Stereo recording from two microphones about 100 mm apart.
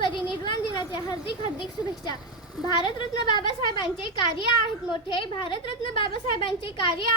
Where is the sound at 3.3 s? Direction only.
55° left (ahead or behind).